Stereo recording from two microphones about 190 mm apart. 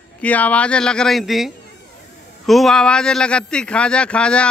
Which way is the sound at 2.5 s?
Centre (ahead or behind).